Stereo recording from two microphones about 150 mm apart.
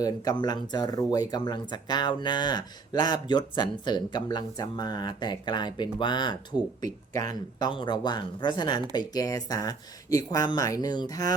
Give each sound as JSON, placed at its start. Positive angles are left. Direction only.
{"t": 0.0, "sound": "speech", "side_deg": 25}